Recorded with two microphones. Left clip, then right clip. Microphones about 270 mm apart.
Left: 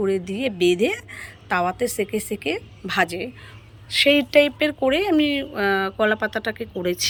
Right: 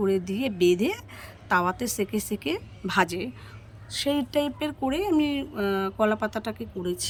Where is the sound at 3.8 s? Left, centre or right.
Centre.